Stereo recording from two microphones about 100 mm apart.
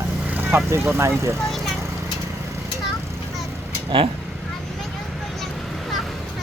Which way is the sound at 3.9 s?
65° right (ahead or behind).